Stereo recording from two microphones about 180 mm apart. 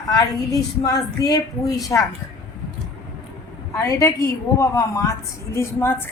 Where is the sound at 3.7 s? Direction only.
15° left (ahead or behind).